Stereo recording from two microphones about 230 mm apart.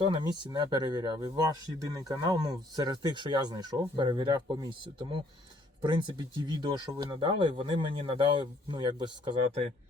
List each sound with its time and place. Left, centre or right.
0.0 s speech: right
5.8 s speech: right